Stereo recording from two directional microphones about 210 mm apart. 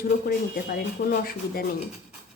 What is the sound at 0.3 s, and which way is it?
Speech, 45° left (ahead or behind).